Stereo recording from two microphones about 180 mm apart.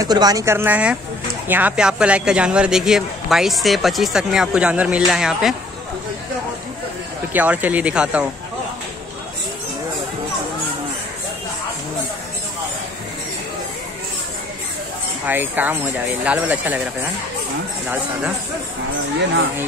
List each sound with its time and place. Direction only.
0.0 s speech: 20° right (ahead or behind); by 5.5 s 5° right (ahead or behind)
7.3 s speech: 10° right (ahead or behind)
15.2 s speech: 10° right (ahead or behind)